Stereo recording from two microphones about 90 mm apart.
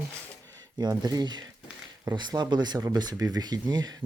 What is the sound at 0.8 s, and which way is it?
Speech, 50° right (ahead or behind).